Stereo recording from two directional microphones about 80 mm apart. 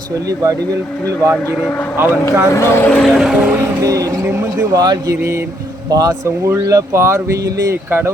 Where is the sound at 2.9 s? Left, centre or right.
Centre.